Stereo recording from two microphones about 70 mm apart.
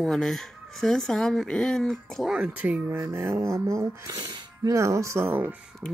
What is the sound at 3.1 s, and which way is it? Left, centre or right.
Speech, right.